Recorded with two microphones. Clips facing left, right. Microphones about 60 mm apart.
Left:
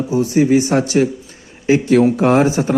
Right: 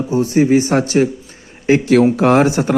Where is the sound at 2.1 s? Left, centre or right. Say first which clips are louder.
Right 1 dB; right.